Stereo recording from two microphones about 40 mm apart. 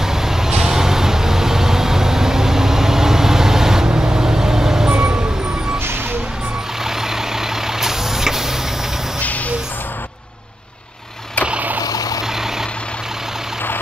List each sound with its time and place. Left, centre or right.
0.0 s vehicle: centre
4.9 s vehicle: right
6.8 s vehicle: centre